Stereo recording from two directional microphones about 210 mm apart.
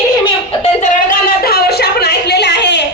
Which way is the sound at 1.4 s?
50° left (ahead or behind).